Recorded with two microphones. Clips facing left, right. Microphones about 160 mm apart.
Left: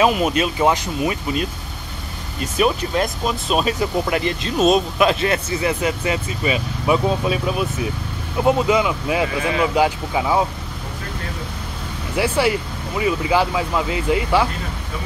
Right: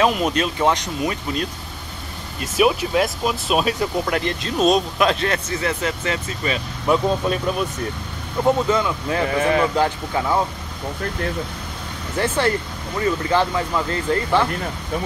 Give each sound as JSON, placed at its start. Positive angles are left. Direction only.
{"t": 0.0, "sound": "speech", "side_deg": 5}
{"t": 2.4, "sound": "speech", "side_deg": -5}
{"t": 12.2, "sound": "speech", "side_deg": 10}